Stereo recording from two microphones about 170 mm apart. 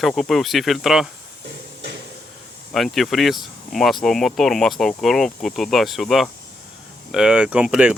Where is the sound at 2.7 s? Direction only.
Centre (ahead or behind).